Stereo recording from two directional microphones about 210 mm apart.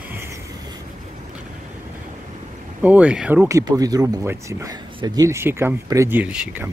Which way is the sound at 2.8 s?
5° right (ahead or behind).